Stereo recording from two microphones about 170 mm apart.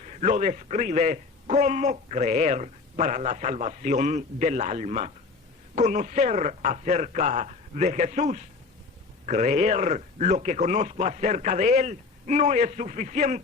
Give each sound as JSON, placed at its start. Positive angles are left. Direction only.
{"t": 0.0, "sound": "a man's voice", "side_deg": -45}